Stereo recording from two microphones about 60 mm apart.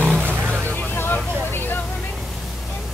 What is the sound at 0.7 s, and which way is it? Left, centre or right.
Vehicle, left.